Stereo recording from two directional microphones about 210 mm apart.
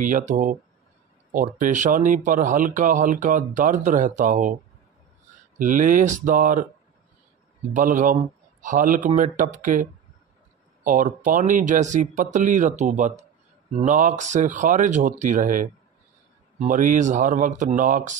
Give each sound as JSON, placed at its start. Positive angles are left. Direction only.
{"t": 0.0, "sound": "speech", "side_deg": -35}
{"t": 5.6, "sound": "speech", "side_deg": -40}
{"t": 7.7, "sound": "speech", "side_deg": -40}